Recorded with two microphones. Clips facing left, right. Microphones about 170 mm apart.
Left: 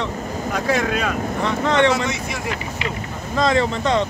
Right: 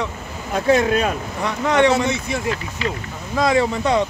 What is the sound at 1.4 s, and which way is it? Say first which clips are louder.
Speech: right 1 dB; 10° right (ahead or behind).